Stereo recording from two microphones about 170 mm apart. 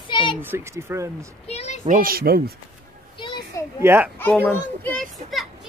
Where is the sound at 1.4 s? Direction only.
40° left (ahead or behind).